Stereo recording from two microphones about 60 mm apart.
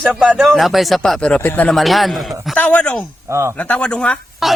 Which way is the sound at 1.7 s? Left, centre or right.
Centre.